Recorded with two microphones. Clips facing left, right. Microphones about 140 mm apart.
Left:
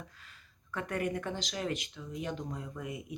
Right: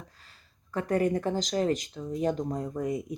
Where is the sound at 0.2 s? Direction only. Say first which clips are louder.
Even; 35° right (ahead or behind).